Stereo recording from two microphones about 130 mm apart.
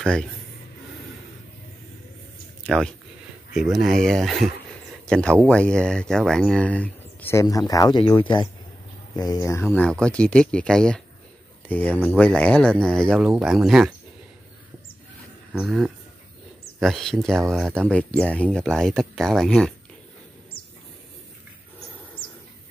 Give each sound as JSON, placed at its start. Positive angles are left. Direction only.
{"t": 0.0, "sound": "speech", "side_deg": 5}
{"t": 2.6, "sound": "speech", "side_deg": 5}
{"t": 7.4, "sound": "speech", "side_deg": 30}
{"t": 9.8, "sound": "speech", "side_deg": 5}
{"t": 15.5, "sound": "speech", "side_deg": -5}